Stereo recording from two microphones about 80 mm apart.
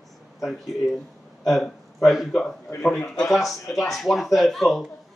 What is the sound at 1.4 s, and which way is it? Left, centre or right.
A man's voice, centre.